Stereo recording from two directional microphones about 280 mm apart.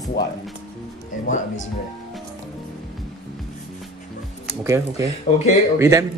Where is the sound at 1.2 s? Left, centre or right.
Left.